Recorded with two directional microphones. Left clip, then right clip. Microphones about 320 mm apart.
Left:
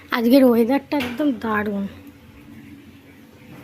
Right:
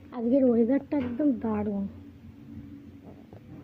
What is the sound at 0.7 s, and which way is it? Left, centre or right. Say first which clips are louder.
Speech: left 6 dB; centre.